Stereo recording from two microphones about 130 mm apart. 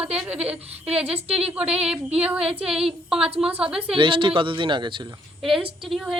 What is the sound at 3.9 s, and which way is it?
A woman's voice, 40° right (ahead or behind).